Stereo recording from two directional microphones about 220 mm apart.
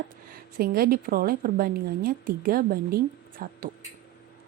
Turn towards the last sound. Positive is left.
turn(degrees=-40)  # may be behind; listen again after turning